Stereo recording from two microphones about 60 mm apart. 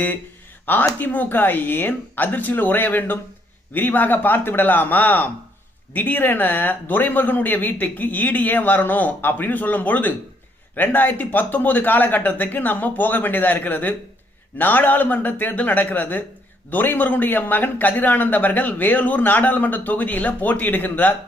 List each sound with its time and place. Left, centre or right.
0.6 s a man's voice: left